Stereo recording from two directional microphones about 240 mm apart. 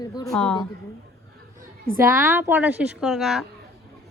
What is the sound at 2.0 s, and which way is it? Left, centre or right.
A woman's voice, centre.